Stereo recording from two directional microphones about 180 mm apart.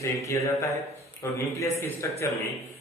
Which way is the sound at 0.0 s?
15° left (ahead or behind).